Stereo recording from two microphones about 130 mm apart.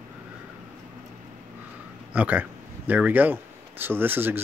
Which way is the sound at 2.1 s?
10° right (ahead or behind).